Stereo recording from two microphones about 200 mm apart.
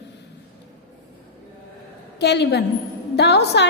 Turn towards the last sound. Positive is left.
turn(degrees=60)  # may be behind; listen again after turning